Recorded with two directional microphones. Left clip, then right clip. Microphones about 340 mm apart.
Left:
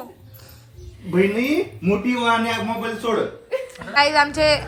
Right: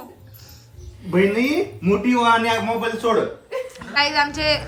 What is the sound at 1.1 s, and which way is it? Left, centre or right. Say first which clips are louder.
A woman's voice: right 1 dB; centre.